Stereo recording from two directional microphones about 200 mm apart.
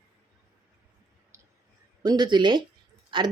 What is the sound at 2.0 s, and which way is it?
Speech, 20° right (ahead or behind).